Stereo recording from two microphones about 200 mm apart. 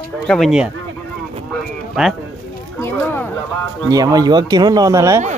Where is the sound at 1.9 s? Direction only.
Centre (ahead or behind).